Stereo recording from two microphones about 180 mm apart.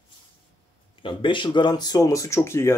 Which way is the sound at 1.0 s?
25° left (ahead or behind).